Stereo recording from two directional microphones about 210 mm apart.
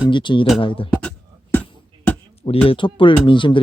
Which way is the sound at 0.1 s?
20° left (ahead or behind).